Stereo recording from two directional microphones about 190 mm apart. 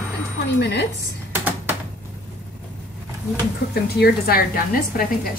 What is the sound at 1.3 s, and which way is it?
Typewriter, 10° right (ahead or behind).